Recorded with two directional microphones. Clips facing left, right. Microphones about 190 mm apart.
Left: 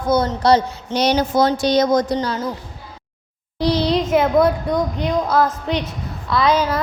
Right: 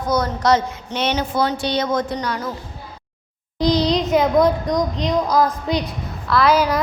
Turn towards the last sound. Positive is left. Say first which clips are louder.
# right 1 dB
turn(degrees=-10)  # may be behind; listen again after turning